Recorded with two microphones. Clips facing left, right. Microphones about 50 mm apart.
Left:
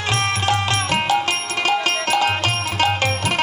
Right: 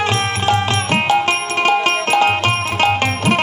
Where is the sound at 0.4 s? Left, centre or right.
Right.